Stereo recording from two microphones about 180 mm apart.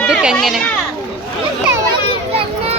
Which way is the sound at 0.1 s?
5° right (ahead or behind).